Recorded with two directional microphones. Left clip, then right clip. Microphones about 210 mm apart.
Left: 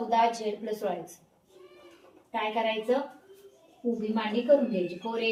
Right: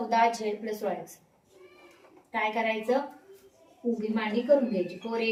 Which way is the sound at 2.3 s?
5° right (ahead or behind).